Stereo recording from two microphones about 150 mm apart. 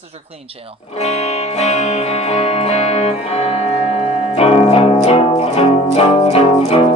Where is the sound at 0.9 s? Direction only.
45° left (ahead or behind).